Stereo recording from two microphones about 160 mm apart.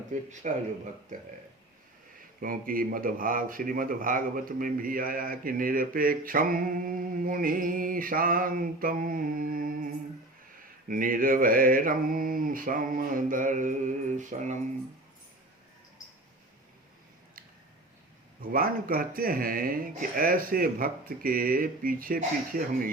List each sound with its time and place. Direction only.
0.1 s speech: 50° right (ahead or behind)
2.4 s a man's voice: 60° right (ahead or behind)
18.5 s a man's voice: 65° right (ahead or behind)